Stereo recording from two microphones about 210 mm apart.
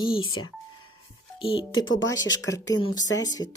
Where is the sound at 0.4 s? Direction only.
85° left.